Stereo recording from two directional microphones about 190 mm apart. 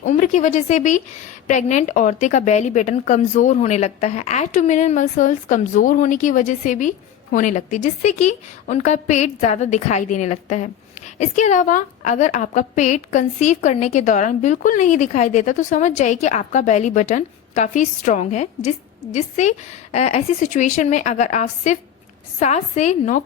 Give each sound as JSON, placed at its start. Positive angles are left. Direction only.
{"t": 0.0, "sound": "a woman's voice", "side_deg": 40}